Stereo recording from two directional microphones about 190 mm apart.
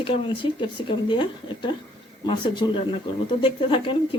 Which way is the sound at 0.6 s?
25° left (ahead or behind).